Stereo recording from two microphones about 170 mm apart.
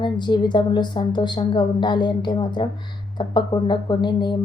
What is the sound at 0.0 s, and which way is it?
A woman's voice, 25° left (ahead or behind).